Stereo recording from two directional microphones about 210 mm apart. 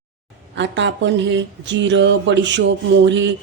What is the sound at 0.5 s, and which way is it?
Speech, 60° right (ahead or behind).